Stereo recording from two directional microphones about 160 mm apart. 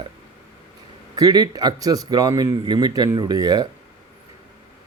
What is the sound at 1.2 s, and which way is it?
A man's voice, 25° right (ahead or behind).